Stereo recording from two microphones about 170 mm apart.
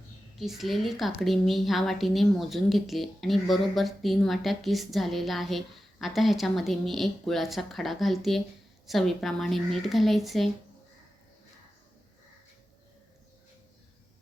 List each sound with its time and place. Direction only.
0.3 s a woman's voice: centre (ahead or behind)